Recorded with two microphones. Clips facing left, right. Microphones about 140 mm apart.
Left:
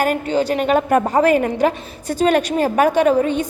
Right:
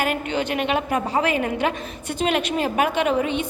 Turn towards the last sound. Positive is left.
turn(degrees=40)  # may be behind; listen again after turning